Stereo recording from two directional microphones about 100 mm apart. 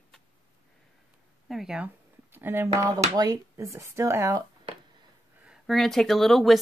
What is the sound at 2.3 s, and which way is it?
Speech, 25° right (ahead or behind).